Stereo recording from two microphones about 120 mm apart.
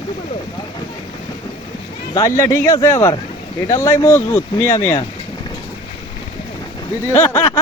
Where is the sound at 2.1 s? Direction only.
25° left (ahead or behind).